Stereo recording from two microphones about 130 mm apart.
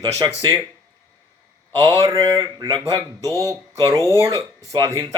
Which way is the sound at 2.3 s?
35° right (ahead or behind).